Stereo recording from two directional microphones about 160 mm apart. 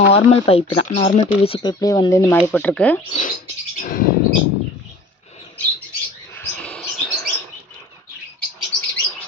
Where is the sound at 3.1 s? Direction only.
50° left (ahead or behind).